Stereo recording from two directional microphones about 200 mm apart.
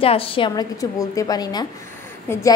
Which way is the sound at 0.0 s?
25° left (ahead or behind).